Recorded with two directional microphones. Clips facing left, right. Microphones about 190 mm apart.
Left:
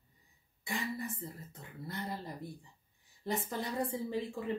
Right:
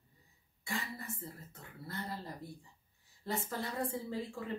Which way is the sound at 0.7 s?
15° left (ahead or behind).